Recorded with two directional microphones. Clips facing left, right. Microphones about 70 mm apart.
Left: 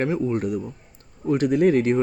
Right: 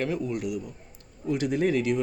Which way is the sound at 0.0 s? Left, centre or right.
Left.